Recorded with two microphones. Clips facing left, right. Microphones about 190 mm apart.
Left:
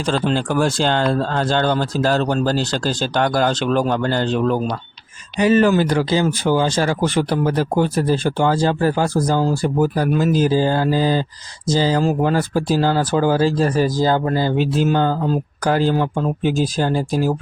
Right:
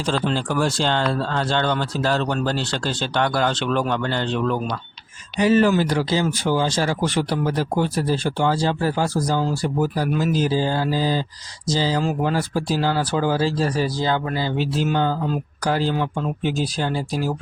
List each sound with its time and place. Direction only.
0.3 s speech: 50° left (ahead or behind)
5.4 s speech: 60° left (ahead or behind)